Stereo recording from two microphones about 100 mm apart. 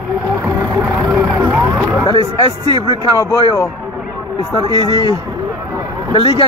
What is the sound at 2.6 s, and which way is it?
Speech, 45° right (ahead or behind).